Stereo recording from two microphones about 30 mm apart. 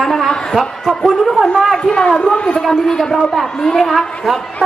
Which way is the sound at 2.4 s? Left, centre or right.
Left.